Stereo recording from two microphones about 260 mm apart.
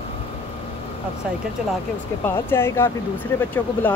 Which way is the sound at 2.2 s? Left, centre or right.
Centre.